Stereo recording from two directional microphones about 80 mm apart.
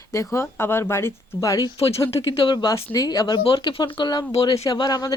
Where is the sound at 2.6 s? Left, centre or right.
Left.